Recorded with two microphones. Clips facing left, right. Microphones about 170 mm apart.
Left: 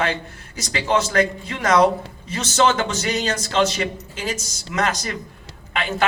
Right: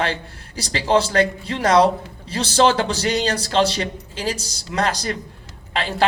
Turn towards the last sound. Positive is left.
turn(degrees=-35)  # may be behind; listen again after turning